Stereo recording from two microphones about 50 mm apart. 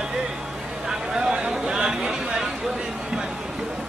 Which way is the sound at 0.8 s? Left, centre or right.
Centre.